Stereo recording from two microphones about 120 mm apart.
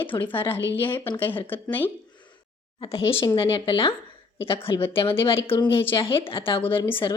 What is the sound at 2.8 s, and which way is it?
Speech, 50° left (ahead or behind).